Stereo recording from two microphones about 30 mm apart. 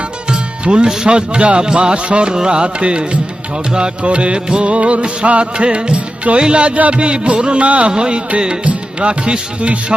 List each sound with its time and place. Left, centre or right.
0.3 s music: right
7.9 s music: right
8.6 s music: right